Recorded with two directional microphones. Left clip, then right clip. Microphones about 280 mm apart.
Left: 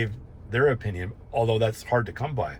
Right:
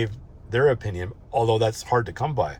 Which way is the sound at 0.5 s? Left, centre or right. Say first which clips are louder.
Right 2 dB; centre.